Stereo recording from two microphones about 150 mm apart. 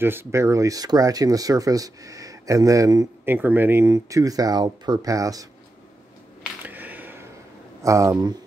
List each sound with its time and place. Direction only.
0.0 s speech: 15° right (ahead or behind)
6.6 s a sound: 10° right (ahead or behind)
7.8 s speech: 20° right (ahead or behind)